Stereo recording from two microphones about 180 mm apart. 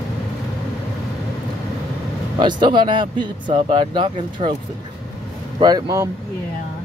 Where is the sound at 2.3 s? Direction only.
25° right (ahead or behind).